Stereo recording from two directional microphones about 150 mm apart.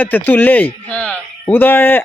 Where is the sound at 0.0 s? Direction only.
15° left (ahead or behind).